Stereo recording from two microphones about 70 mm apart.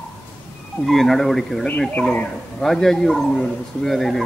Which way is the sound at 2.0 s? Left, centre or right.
Centre.